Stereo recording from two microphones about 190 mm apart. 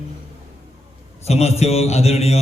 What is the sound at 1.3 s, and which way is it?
A man's voice, 35° left (ahead or behind).